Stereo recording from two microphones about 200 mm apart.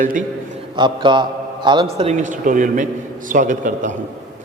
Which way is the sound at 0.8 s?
25° right (ahead or behind).